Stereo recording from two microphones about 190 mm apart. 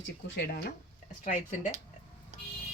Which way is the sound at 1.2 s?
40° left (ahead or behind).